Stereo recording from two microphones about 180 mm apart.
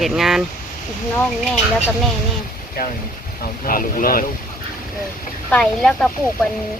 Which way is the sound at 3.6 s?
50° left (ahead or behind).